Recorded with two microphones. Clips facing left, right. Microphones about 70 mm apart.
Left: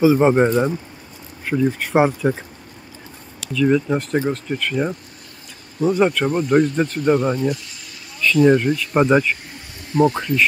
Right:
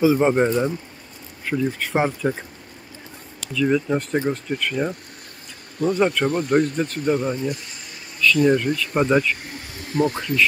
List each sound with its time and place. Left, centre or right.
0.0 s speech: centre
3.3 s speech: centre
5.8 s speech: centre
7.1 s speech: left
8.2 s speech: left
9.9 s speech: left